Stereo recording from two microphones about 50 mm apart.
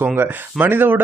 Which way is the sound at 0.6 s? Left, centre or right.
Right.